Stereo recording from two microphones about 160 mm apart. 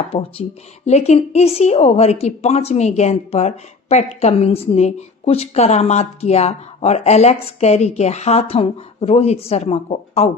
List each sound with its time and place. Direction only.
0.1 s a woman's voice: 35° left (ahead or behind)